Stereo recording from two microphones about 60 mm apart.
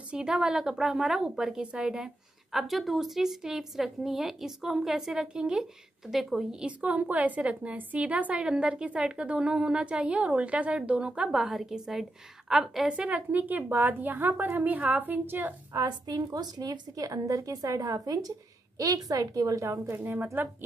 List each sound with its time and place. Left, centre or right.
0.1 s a woman's voice: centre
2.5 s a woman's voice: centre
6.6 s a woman's voice: right
11.2 s a woman's voice: centre
12.9 s a woman's voice: right
15.7 s speech: right
18.8 s a woman's voice: right
20.4 s a woman's voice: right